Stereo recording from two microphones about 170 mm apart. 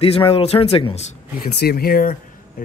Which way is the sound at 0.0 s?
35° left (ahead or behind).